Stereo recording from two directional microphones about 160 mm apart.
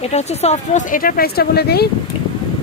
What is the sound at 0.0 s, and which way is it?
Speech, 45° left (ahead or behind).